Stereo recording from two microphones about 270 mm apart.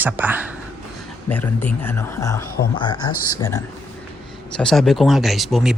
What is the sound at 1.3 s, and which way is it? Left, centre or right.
Speech, centre.